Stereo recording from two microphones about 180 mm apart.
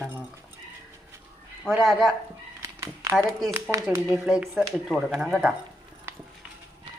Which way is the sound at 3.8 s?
10° right (ahead or behind).